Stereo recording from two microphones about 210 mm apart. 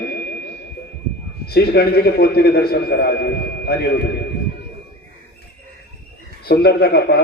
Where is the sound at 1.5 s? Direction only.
45° left (ahead or behind).